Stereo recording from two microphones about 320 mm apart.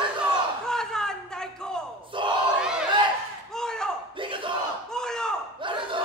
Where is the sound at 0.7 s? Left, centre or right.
Centre.